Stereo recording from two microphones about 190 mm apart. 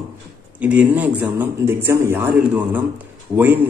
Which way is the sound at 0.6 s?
5° right (ahead or behind).